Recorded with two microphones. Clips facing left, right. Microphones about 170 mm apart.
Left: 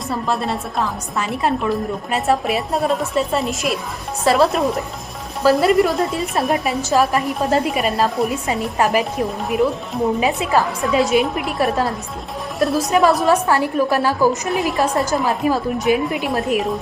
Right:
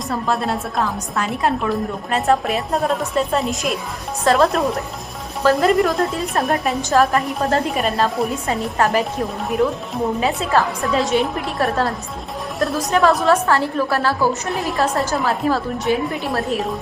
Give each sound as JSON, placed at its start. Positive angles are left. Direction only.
{"t": 0.1, "sound": "a woman's voice", "side_deg": 0}
{"t": 8.8, "sound": "a woman's voice", "side_deg": 15}
{"t": 10.2, "sound": "a woman's voice", "side_deg": 15}
{"t": 10.8, "sound": "a woman's voice", "side_deg": 0}
{"t": 12.5, "sound": "a woman's voice", "side_deg": 0}
{"t": 13.2, "sound": "a woman's voice", "side_deg": 15}
{"t": 14.5, "sound": "a woman's voice", "side_deg": 0}
{"t": 15.1, "sound": "a woman's voice", "side_deg": 15}